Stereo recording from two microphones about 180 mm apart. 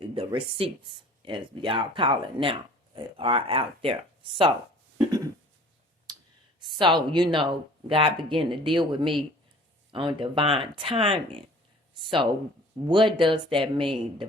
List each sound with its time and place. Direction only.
0.0 s speech: 30° right (ahead or behind)
4.9 s a sound: 20° right (ahead or behind)
6.1 s clicking: 25° right (ahead or behind)
6.6 s speech: 25° right (ahead or behind)
12.9 s speech: 25° right (ahead or behind)